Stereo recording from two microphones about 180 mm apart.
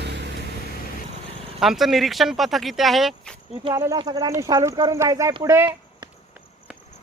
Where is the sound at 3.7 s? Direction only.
15° right (ahead or behind).